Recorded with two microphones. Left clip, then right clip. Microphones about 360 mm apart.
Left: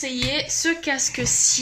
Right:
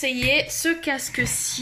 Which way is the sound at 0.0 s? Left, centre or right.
Centre.